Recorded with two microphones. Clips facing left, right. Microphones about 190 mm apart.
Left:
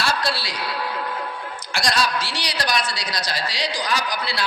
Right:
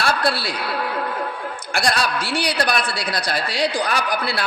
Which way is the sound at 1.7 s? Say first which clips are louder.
Right 1 dB; 55° right (ahead or behind).